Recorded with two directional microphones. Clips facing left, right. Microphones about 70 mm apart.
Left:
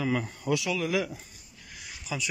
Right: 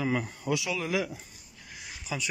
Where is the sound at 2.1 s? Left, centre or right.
Right.